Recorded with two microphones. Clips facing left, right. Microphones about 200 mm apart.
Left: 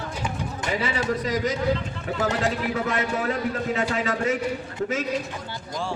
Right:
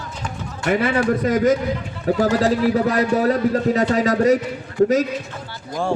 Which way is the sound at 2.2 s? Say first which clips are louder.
Right 7 dB; 35° right (ahead or behind).